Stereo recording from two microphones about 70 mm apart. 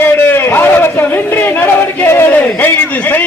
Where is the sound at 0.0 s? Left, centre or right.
Left.